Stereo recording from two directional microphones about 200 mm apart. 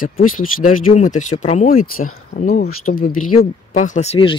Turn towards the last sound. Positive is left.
turn(degrees=30)  # may be behind; listen again after turning